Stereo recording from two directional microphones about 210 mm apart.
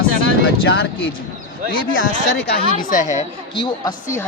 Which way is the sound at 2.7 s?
40° left (ahead or behind).